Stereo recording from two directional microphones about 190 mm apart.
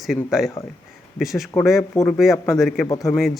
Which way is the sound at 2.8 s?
15° left (ahead or behind).